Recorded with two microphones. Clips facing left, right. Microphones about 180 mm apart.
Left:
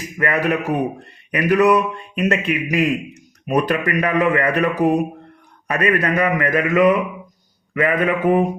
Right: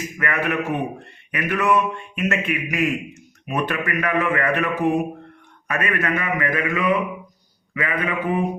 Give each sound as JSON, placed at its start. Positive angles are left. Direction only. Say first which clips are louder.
{"t": 0.2, "sound": "a man's voice", "louder": "left 5 dB", "side_deg": 35}